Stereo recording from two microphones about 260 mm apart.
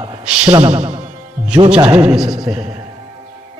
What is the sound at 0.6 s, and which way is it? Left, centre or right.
Speech, right.